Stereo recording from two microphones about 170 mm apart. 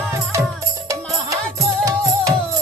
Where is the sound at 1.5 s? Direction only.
20° right (ahead or behind).